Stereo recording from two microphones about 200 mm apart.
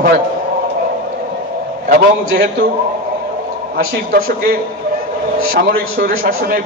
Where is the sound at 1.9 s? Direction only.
45° right (ahead or behind).